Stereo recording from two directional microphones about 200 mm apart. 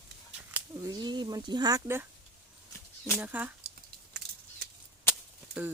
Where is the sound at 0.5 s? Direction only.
15° right (ahead or behind).